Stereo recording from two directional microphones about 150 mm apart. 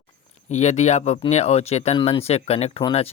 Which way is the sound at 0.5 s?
50° left (ahead or behind).